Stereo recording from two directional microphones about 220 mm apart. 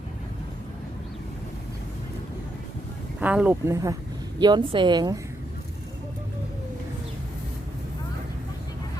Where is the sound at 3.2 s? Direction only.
5° right (ahead or behind).